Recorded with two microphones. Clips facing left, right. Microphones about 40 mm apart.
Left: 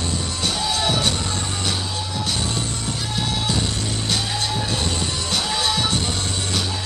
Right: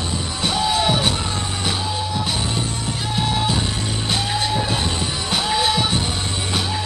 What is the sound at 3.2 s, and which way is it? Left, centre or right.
Music, centre.